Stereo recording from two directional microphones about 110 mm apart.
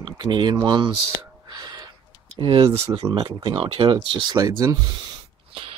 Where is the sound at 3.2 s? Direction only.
40° right (ahead or behind).